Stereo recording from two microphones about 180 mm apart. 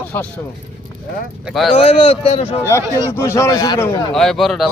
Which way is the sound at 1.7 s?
30° left (ahead or behind).